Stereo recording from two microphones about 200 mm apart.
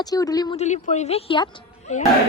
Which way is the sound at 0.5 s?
35° left (ahead or behind).